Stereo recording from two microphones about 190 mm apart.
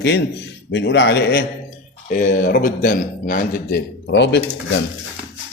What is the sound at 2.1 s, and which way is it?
A man's voice, 45° left (ahead or behind).